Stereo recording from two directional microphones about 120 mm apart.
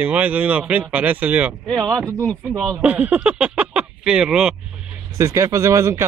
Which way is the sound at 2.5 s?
25° right (ahead or behind).